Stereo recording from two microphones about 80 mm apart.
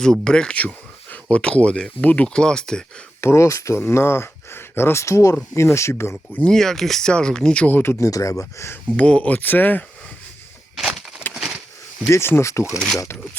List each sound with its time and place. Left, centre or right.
0.0 s speech: centre
3.2 s speech: left
3.8 s speech: left
6.4 s speech: centre; by 8.0 s left
8.0 s speech: left
9.0 s speech: centre
10.8 s a sound: centre
11.3 s a sound: left
12.0 s speech: left